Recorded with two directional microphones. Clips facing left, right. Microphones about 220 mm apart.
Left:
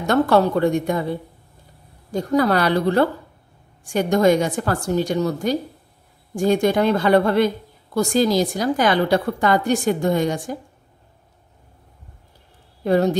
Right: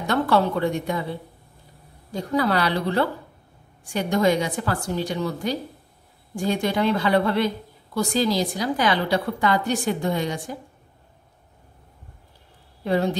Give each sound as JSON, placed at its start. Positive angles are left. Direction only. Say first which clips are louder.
{"t": 0.0, "sound": "speech", "louder": "left 4 dB", "side_deg": 45}
{"t": 2.1, "sound": "speech", "louder": "left 4 dB", "side_deg": 45}
{"t": 12.8, "sound": "speech", "louder": "left 5 dB", "side_deg": 45}